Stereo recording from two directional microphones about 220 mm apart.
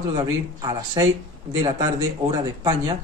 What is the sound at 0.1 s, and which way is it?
Speech, 20° right (ahead or behind).